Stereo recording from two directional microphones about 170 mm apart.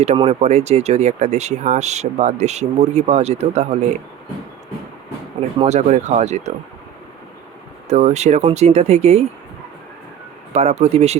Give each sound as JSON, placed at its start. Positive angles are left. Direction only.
{"t": 0.0, "sound": "speech", "side_deg": -40}
{"t": 5.5, "sound": "speech", "side_deg": -40}
{"t": 7.9, "sound": "speech", "side_deg": -40}
{"t": 10.5, "sound": "speech", "side_deg": -40}